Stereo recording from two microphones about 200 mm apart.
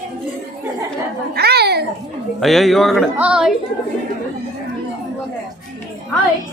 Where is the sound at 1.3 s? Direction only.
55° right (ahead or behind).